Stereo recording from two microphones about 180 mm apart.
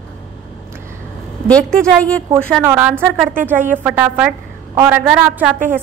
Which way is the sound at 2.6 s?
10° right (ahead or behind).